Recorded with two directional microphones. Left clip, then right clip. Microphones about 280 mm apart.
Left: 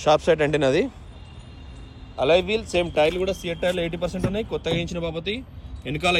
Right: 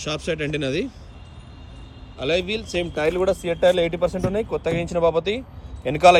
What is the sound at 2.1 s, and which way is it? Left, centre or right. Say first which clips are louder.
Speech: left 4 dB; centre.